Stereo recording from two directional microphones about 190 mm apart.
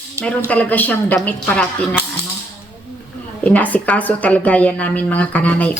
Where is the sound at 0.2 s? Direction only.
10° left (ahead or behind).